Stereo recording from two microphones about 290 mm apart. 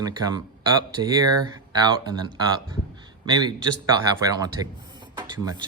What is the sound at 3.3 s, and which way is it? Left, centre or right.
Speech, centre.